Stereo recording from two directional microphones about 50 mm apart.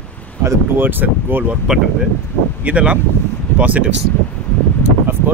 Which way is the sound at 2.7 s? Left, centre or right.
Right.